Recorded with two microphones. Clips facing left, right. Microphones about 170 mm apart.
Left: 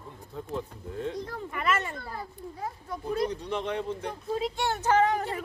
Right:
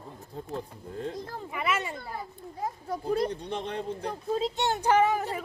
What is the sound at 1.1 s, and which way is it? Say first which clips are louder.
Speech: left 1 dB; 10° right (ahead or behind).